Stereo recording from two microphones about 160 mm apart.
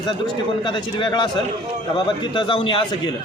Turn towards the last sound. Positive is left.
turn(degrees=30)  # may be behind; listen again after turning